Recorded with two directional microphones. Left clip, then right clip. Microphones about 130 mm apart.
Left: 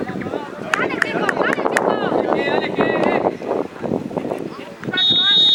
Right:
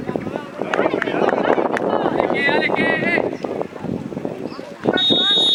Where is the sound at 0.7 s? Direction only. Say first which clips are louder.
Even; 40° left (ahead or behind).